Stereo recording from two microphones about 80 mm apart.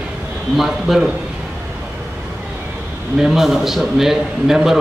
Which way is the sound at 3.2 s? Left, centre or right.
Centre.